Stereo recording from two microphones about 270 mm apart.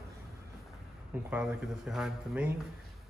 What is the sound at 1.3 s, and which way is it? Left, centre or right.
A man's voice, centre.